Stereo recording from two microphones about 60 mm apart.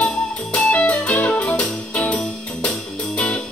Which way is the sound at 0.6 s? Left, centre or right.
Left.